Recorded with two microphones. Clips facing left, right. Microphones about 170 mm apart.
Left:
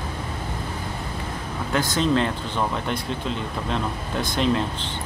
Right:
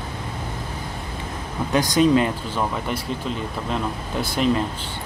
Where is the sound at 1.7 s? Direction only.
15° right (ahead or behind).